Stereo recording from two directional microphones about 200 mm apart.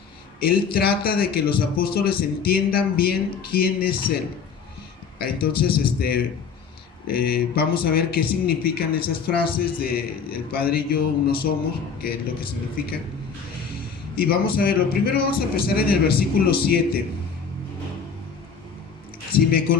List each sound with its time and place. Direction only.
0.3 s speech: 50° left (ahead or behind)
5.2 s speech: 50° left (ahead or behind)
14.2 s speech: 50° left (ahead or behind)
19.3 s speech: 50° left (ahead or behind)